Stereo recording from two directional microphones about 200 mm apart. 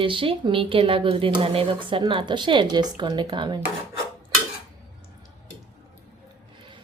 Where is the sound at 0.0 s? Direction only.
25° right (ahead or behind).